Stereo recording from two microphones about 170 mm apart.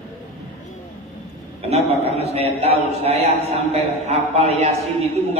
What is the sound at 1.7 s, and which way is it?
A man's voice, 35° right (ahead or behind).